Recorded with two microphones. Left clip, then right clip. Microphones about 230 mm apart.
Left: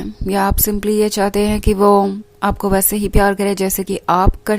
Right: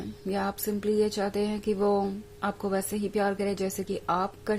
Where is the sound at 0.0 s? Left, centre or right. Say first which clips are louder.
Left 13 dB; left.